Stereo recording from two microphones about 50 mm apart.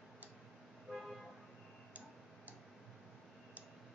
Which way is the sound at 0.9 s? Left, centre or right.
Centre.